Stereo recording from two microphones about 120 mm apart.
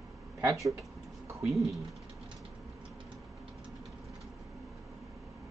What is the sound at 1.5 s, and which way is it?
Speech, centre (ahead or behind).